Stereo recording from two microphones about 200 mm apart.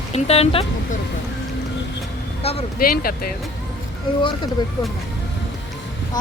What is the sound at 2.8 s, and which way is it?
Speech, 50° left (ahead or behind).